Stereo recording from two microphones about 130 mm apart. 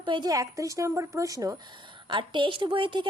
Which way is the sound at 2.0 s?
40° right (ahead or behind).